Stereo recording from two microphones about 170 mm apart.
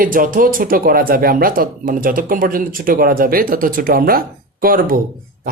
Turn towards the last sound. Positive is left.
turn(degrees=-55)  # may be behind; listen again after turning